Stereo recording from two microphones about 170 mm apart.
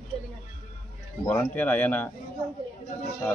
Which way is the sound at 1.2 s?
10° left (ahead or behind).